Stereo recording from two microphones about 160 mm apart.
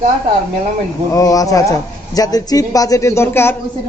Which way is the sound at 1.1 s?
20° left (ahead or behind).